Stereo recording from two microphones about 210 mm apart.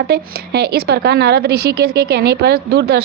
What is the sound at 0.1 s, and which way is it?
A woman's voice, 50° right (ahead or behind).